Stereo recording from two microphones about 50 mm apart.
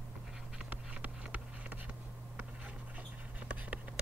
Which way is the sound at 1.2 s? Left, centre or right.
Right.